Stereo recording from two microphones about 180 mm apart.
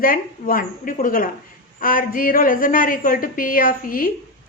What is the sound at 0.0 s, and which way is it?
A woman's voice, 50° left (ahead or behind).